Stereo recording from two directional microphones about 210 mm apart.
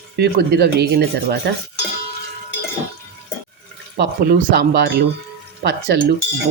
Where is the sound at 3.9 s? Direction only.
45° right (ahead or behind).